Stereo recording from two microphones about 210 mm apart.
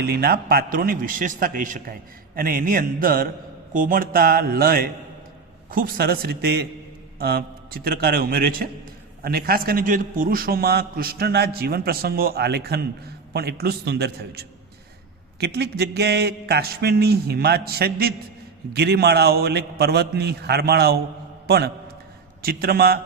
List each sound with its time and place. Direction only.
0.0 s a man's voice: 50° right (ahead or behind)